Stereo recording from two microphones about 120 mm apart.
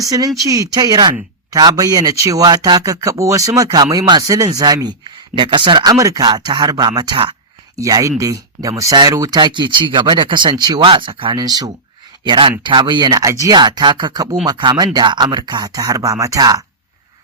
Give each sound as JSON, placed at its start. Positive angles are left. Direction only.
{"t": 0.0, "sound": "speech", "side_deg": -30}